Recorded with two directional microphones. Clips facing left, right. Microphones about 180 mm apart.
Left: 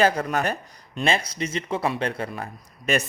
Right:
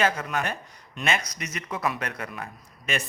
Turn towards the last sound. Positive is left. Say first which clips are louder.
# left 6 dB
turn(degrees=40)  # may be behind; listen again after turning